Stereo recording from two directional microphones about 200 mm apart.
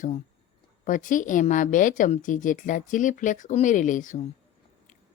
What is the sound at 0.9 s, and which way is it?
Speech, 40° left (ahead or behind).